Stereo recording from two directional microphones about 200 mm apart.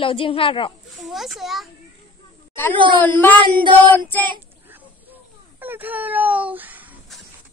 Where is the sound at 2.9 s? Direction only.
10° left (ahead or behind).